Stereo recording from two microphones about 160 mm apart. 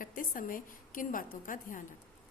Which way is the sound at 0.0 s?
60° left (ahead or behind).